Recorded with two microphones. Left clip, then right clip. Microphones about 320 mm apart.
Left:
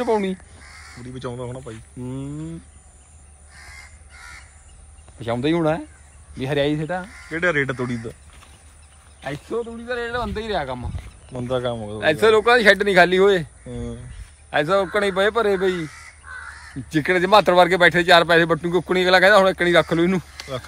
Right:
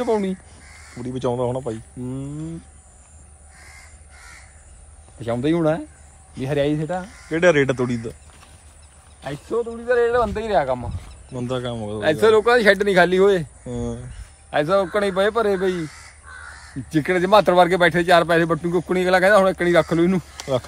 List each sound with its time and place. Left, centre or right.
0.0 s speech: centre
5.2 s speech: centre
9.2 s speech: centre
9.8 s speech: right
11.4 s speech: centre